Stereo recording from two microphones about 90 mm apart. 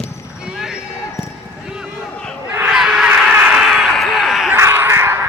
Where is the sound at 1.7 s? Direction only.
10° right (ahead or behind).